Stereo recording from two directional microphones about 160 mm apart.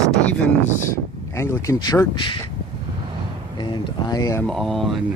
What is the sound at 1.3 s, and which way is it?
Speech, 15° left (ahead or behind).